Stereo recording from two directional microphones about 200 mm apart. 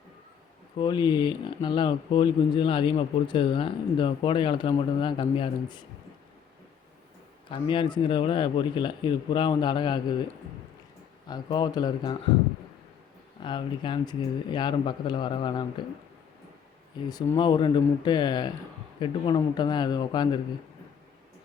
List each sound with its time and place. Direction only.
0.8 s speech: 20° left (ahead or behind)
7.5 s speech: 25° left (ahead or behind)
11.3 s speech: 20° left (ahead or behind)
13.4 s speech: 25° left (ahead or behind)
17.1 s speech: 20° left (ahead or behind)